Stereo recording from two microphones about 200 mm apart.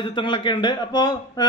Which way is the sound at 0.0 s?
25° left (ahead or behind).